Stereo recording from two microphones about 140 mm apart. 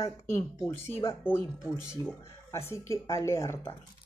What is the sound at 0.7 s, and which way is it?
Speech, 15° left (ahead or behind).